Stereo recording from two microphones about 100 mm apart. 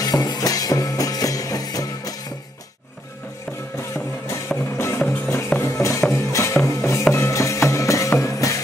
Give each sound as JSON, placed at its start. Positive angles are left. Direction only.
{"t": 0.0, "sound": "music", "side_deg": 40}
{"t": 3.9, "sound": "music", "side_deg": 30}